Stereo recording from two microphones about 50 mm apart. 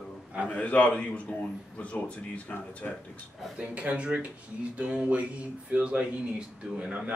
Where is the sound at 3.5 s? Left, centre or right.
Right.